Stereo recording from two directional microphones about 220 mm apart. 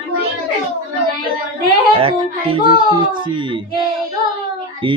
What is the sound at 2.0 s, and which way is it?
Speech, 25° right (ahead or behind).